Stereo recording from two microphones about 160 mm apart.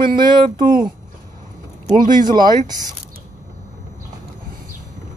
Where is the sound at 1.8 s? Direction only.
55° right (ahead or behind).